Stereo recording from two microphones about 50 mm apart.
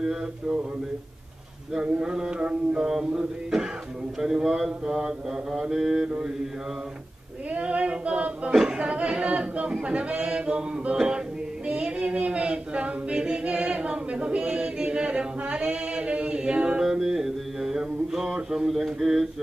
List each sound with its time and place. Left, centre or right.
0.0 s mantra: centre
1.8 s singing: centre
2.9 s mantra: centre
7.5 s singing: right
16.8 s mantra: centre